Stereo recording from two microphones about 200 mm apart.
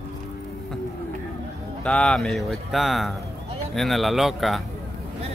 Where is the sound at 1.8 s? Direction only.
5° left (ahead or behind).